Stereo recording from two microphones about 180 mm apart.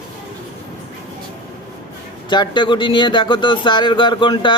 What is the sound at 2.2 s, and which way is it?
Speech, 25° left (ahead or behind).